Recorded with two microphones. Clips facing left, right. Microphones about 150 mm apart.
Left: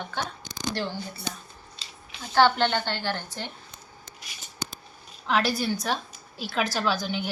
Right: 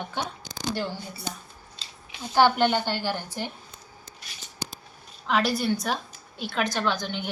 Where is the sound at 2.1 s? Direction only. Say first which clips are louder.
Even; 15° right (ahead or behind).